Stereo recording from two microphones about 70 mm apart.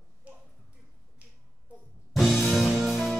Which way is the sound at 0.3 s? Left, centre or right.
Centre.